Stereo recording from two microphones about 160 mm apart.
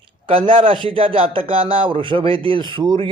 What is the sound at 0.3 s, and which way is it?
A man's voice, 35° right (ahead or behind).